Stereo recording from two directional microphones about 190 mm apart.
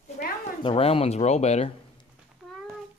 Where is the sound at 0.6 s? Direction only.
30° left (ahead or behind).